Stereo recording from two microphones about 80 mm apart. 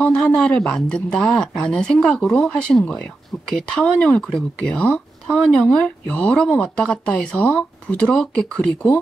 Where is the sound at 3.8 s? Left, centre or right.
Centre.